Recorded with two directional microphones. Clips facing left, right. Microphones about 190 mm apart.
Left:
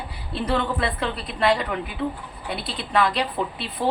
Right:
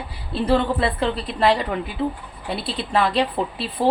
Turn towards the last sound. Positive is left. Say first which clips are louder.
# right 3 dB
turn(degrees=-30)  # may be behind; listen again after turning